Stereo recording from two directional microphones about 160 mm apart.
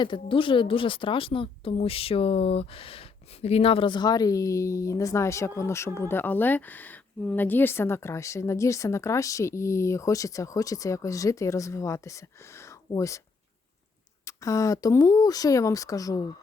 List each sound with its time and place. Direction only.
0.0 s a woman's voice: 30° left (ahead or behind)
14.3 s a woman's voice: 20° left (ahead or behind)